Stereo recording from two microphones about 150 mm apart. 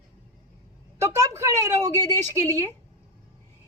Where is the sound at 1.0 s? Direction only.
20° right (ahead or behind).